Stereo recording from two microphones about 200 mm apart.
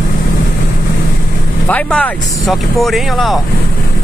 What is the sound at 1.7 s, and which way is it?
Speech, 5° left (ahead or behind).